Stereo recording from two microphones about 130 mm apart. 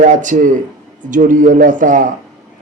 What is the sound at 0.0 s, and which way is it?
A man's voice, 75° right (ahead or behind).